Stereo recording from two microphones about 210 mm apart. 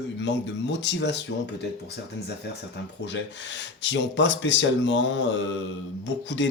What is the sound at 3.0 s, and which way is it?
Speech, 60° left (ahead or behind).